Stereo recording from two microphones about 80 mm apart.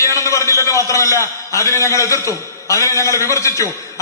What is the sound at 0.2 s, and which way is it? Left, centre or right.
A man's voice, left.